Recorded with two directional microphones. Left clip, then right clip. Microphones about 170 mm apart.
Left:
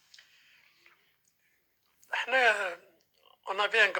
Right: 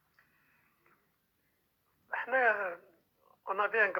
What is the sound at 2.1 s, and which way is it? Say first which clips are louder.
Speech: left 3 dB; 45° left (ahead or behind).